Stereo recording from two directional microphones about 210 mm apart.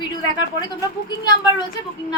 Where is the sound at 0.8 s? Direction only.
20° left (ahead or behind).